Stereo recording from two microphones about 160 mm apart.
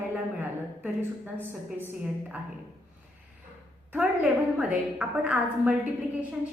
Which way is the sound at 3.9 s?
10° right (ahead or behind).